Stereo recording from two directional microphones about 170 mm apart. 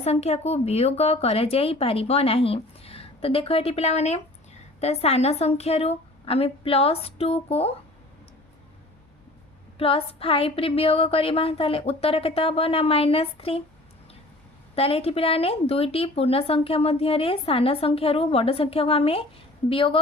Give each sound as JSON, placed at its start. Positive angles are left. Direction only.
{"t": 0.0, "sound": "a woman's voice", "side_deg": 40}
{"t": 9.7, "sound": "a woman's voice", "side_deg": 35}
{"t": 14.8, "sound": "a woman's voice", "side_deg": 35}